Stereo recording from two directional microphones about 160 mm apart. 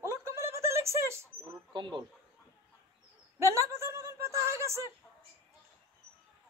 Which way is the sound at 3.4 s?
15° right (ahead or behind).